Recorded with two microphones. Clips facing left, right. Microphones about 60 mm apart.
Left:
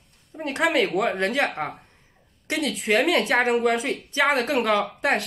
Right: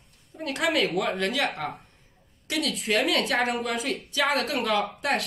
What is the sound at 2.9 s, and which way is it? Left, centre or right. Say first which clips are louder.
Speech: left 4 dB; left.